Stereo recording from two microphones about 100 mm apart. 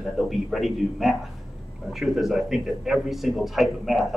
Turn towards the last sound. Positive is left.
turn(degrees=0)  # may be behind; listen again after turning